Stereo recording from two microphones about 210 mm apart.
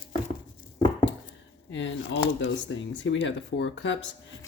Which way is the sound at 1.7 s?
60° left (ahead or behind).